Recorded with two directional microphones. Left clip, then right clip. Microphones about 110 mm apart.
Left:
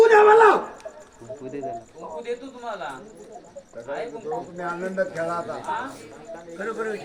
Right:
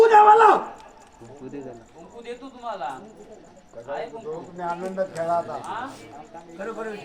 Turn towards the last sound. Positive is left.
turn(degrees=-15)  # may be behind; listen again after turning